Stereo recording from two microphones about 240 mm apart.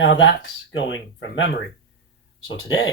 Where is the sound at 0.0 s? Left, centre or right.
Left.